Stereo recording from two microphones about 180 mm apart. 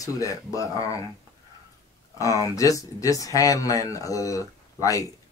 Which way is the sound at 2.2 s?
20° left (ahead or behind).